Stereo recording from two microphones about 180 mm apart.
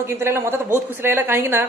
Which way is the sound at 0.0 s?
15° right (ahead or behind).